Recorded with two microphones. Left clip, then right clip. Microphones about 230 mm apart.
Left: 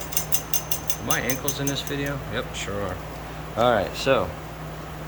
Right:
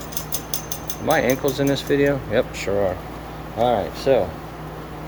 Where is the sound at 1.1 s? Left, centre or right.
Right.